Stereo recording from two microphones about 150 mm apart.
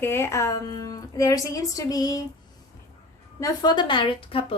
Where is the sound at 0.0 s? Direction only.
15° left (ahead or behind).